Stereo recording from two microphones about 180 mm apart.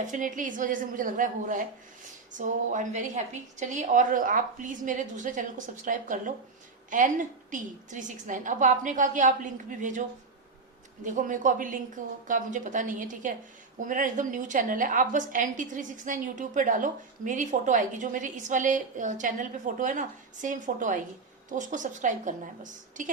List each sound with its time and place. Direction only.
0.1 s a woman's voice: 45° right (ahead or behind)
11.0 s a woman's voice: 45° right (ahead or behind)